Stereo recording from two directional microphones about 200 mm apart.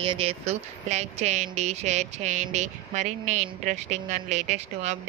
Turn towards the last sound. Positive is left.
turn(degrees=-35)  # may be behind; listen again after turning